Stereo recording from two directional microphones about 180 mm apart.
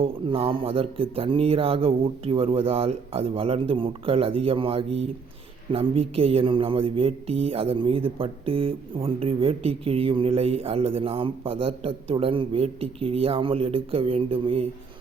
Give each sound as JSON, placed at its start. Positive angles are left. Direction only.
{"t": 0.0, "sound": "speech", "side_deg": -30}